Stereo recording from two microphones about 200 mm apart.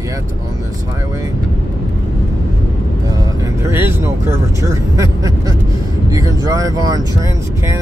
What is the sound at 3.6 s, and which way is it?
Speech, 10° right (ahead or behind).